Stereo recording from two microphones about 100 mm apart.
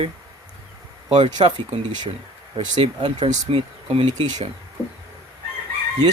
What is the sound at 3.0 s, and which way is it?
Speech, 60° right (ahead or behind).